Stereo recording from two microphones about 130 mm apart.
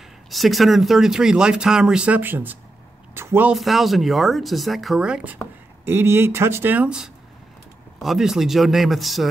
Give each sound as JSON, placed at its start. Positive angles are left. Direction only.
{"t": 0.3, "sound": "speech", "side_deg": 0}
{"t": 3.2, "sound": "a sound", "side_deg": -15}
{"t": 3.5, "sound": "speech", "side_deg": 0}